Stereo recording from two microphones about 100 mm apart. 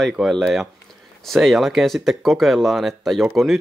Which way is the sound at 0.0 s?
Centre (ahead or behind).